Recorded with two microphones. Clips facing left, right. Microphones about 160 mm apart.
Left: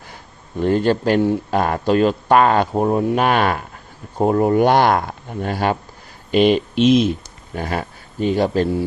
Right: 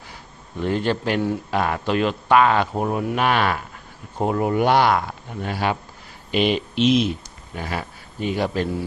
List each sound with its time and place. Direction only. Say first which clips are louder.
0.6 s speech: left 6 dB; 45° left (ahead or behind)
2.8 s speech: left 5 dB; 30° left (ahead or behind)
3.2 s speech: left 3 dB; 45° left (ahead or behind)